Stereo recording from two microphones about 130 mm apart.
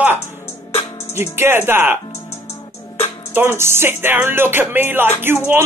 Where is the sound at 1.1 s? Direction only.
20° right (ahead or behind).